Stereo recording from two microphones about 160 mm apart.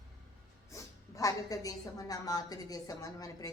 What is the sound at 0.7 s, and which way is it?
A woman's voice, 20° left (ahead or behind).